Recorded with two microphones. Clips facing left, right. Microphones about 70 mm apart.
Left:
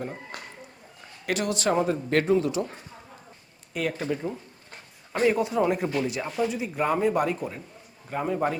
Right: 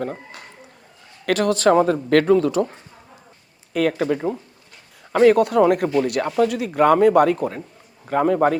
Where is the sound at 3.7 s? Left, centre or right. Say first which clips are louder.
Right 8 dB; right.